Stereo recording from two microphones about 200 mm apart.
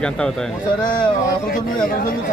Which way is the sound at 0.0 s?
5° left (ahead or behind).